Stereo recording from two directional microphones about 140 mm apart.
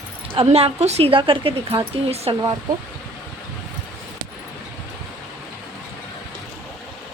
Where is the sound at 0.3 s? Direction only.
45° right (ahead or behind).